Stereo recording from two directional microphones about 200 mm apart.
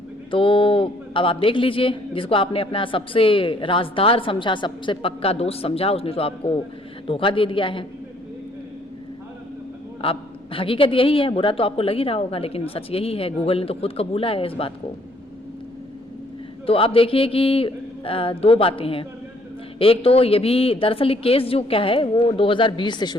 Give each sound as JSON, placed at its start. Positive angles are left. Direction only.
{"t": 0.3, "sound": "a man's voice", "side_deg": 25}
{"t": 10.0, "sound": "a man's voice", "side_deg": 25}
{"t": 16.6, "sound": "a man's voice", "side_deg": 30}